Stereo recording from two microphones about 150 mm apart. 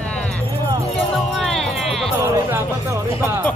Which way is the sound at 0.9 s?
Centre (ahead or behind).